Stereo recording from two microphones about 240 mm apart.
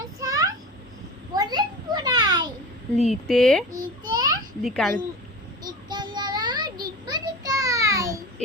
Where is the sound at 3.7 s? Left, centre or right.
Centre.